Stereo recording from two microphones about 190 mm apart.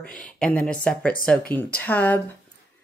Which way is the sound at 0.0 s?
5° left (ahead or behind).